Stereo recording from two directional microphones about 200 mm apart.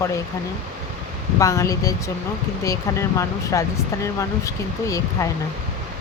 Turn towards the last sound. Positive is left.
turn(degrees=15)  # may be behind; listen again after turning